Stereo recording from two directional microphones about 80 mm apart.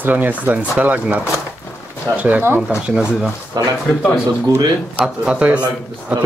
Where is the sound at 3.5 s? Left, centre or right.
Right.